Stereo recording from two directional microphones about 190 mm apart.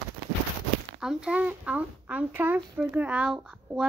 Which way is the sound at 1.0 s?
5° right (ahead or behind).